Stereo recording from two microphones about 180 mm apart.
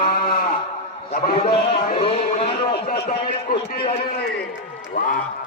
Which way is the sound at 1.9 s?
30° left (ahead or behind).